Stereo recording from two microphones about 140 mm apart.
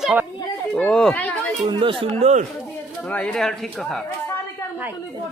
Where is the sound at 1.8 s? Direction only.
40° right (ahead or behind).